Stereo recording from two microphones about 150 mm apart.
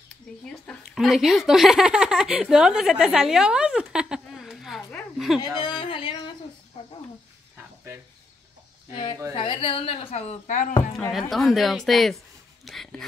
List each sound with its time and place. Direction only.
0.5 s speech: 5° left (ahead or behind)
5.6 s speech: 35° left (ahead or behind)
6.7 s a sound: 40° left (ahead or behind)
7.5 s a sound: 15° right (ahead or behind)
9.3 s a woman's voice: 35° left (ahead or behind); by 10.7 s 55° left (ahead or behind)
11.1 s a woman's voice: centre (ahead or behind)